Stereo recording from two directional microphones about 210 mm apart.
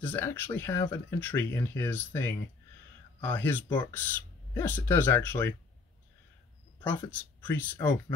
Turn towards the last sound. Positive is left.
turn(degrees=10)  # may be behind; listen again after turning